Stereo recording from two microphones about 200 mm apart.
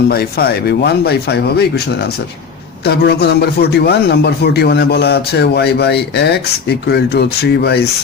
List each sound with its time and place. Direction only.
0.1 s a man's voice: 50° left (ahead or behind)